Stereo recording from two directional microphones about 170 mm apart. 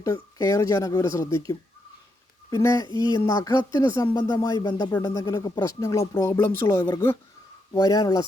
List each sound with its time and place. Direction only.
0.0 s a woman's voice: 20° left (ahead or behind)